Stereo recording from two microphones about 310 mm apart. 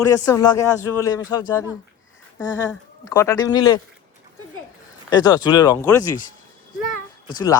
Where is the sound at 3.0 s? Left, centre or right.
Centre.